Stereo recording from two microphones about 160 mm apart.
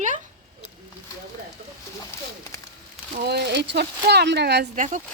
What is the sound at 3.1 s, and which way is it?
Speech, 90° right.